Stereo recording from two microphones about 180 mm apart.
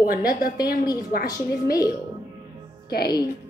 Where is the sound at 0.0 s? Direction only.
55° left (ahead or behind).